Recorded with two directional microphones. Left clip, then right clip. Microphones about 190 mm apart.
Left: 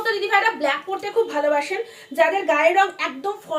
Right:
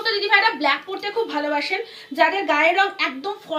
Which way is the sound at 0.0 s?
45° left (ahead or behind).